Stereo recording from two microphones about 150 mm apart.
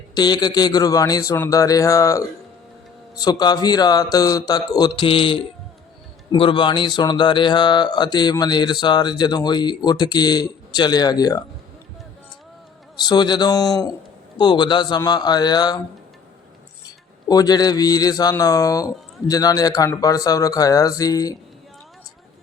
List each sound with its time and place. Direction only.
0.1 s speech: 30° left (ahead or behind)
13.0 s speech: 30° left (ahead or behind)
17.2 s speech: 25° left (ahead or behind)